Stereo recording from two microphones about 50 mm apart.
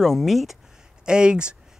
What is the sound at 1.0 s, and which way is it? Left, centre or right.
Speech, centre.